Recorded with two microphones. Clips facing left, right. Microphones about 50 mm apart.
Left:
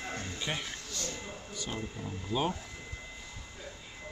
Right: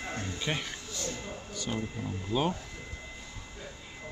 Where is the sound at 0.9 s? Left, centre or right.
Right.